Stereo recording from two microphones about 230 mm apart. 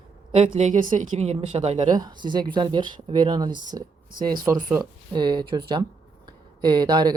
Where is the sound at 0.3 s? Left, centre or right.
Right.